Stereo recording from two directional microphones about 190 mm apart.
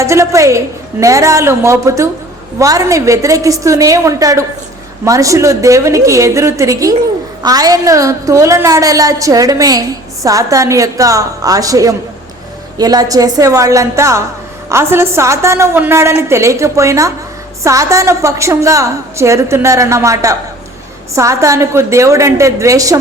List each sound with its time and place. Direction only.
0.0 s a woman's voice: 15° right (ahead or behind)